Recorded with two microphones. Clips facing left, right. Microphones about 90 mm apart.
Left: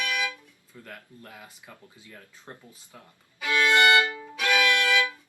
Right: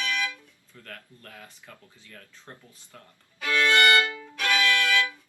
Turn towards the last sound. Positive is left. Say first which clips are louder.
# left 1 dB
turn(degrees=20)  # may be behind; listen again after turning